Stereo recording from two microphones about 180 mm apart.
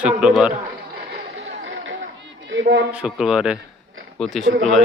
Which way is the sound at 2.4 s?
85° right.